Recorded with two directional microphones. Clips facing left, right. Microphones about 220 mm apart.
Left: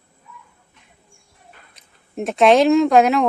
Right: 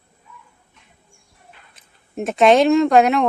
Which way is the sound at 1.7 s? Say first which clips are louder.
Even; centre (ahead or behind).